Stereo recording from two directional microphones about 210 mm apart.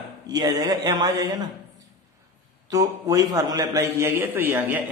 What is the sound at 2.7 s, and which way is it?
A man's voice, 15° right (ahead or behind).